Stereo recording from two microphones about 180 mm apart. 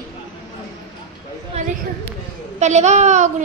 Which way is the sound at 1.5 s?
35° right (ahead or behind).